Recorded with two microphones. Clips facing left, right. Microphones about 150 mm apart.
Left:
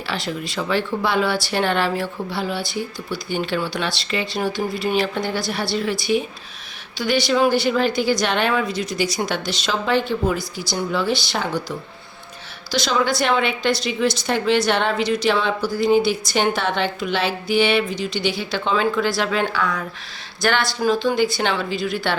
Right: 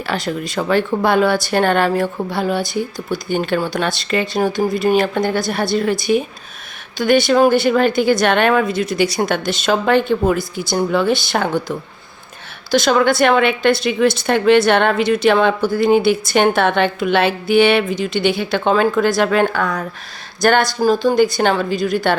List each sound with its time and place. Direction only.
0.0 s a woman's voice: 50° right (ahead or behind)